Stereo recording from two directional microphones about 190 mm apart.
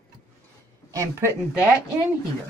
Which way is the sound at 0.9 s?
15° right (ahead or behind).